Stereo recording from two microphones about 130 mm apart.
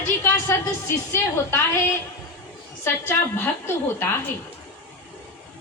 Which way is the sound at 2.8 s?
15° left (ahead or behind).